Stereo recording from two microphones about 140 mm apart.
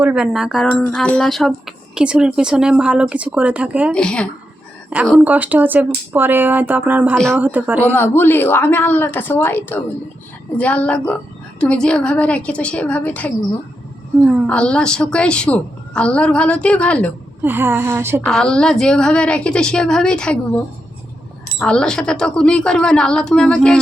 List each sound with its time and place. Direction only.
0.0 s speech: 5° right (ahead or behind)
0.7 s speech: 10° left (ahead or behind); by 3.9 s 10° right (ahead or behind)
3.9 s a woman's voice: 5° left (ahead or behind)
5.2 s speech: 10° right (ahead or behind)
7.9 s a woman's voice: 15° left (ahead or behind)
14.4 s a woman's voice: 10° left (ahead or behind)
17.4 s speech: 15° right (ahead or behind)
18.2 s speech: 5° left (ahead or behind)
21.6 s speech: 5° left (ahead or behind)